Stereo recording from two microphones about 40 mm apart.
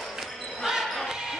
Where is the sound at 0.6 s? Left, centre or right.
Centre.